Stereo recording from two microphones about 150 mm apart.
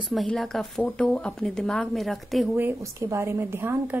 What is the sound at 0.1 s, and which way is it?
Speech, centre (ahead or behind).